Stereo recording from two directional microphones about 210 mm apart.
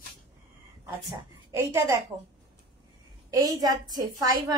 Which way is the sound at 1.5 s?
10° right (ahead or behind).